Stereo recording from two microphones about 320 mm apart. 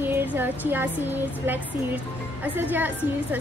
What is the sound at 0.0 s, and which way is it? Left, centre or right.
A woman's voice, centre.